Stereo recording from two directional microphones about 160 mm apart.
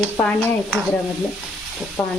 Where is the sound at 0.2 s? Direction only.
10° left (ahead or behind).